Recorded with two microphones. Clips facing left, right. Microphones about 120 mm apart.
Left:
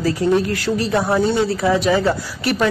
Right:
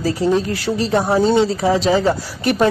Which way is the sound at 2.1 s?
20° right (ahead or behind).